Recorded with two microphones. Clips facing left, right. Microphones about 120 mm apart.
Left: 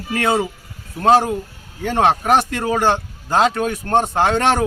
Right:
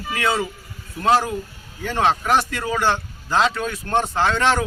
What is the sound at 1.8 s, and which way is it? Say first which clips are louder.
A man's voice: left 4 dB; 55° left (ahead or behind).